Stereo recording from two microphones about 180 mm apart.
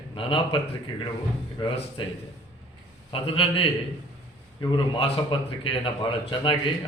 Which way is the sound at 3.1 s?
30° left (ahead or behind).